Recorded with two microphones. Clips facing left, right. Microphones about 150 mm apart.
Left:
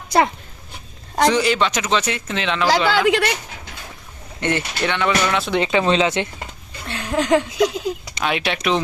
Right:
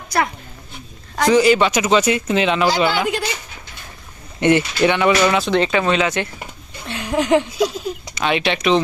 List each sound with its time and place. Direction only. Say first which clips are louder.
1.3 s speech: right 10 dB; 5° right (ahead or behind)
2.6 s speech: left 1 dB; 90° left
4.4 s speech: right 7 dB; 10° right (ahead or behind)
5.5 s speech: right 2 dB; 15° left (ahead or behind)
5.8 s speech: left 1 dB; 25° left (ahead or behind)
6.4 s a sound: even; 15° right (ahead or behind)
8.2 s speech: right 3 dB; centre (ahead or behind)